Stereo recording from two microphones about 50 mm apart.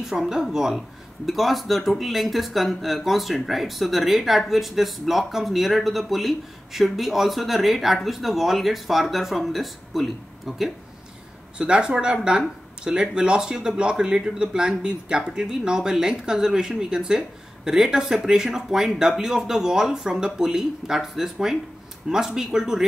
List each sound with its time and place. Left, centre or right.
0.0 s speech: centre
11.5 s speech: centre